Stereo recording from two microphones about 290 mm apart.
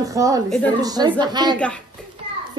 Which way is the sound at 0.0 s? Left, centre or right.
Centre.